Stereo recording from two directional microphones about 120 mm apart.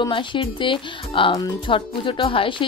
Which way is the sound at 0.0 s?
45° left (ahead or behind).